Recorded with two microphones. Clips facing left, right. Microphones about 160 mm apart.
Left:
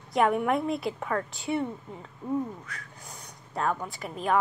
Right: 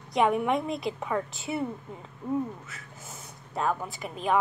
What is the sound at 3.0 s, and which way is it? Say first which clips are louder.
Speech: right 1 dB; 5° right (ahead or behind).